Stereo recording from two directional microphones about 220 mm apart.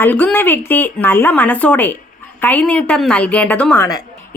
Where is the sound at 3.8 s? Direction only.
15° left (ahead or behind).